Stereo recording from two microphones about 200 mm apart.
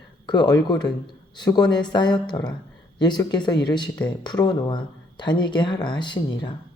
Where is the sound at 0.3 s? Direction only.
20° left (ahead or behind).